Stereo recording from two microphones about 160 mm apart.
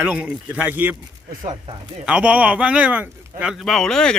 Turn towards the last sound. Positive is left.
turn(degrees=5)  # may be behind; listen again after turning